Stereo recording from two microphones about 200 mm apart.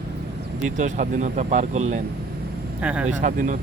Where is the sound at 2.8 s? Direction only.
5° right (ahead or behind).